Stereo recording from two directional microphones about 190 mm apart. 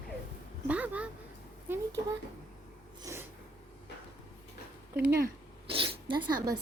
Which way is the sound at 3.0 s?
15° right (ahead or behind).